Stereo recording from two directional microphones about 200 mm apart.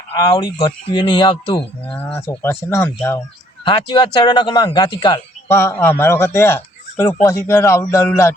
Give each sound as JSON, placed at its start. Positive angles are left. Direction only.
{"t": 0.2, "sound": "speech", "side_deg": 20}
{"t": 2.1, "sound": "speech", "side_deg": 10}
{"t": 3.6, "sound": "speech", "side_deg": 25}